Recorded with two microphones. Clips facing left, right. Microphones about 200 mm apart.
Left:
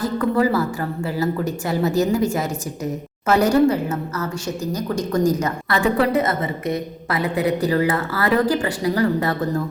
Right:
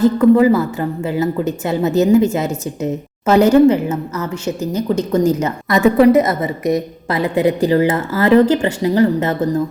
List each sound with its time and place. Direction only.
0.0 s a woman's voice: 20° right (ahead or behind)
7.1 s a woman's voice: 25° right (ahead or behind)